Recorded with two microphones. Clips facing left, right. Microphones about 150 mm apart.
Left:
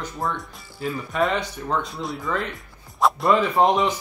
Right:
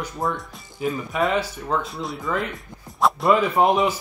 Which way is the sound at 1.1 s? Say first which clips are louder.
Left 1 dB; centre (ahead or behind).